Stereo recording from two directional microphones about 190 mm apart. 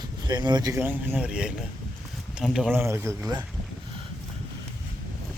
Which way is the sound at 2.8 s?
15° right (ahead or behind).